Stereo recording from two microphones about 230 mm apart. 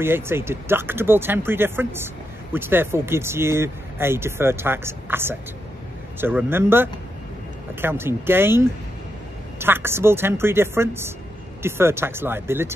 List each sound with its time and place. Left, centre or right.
0.0 s speech: centre